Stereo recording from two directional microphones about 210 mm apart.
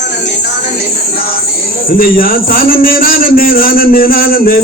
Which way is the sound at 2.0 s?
45° left (ahead or behind).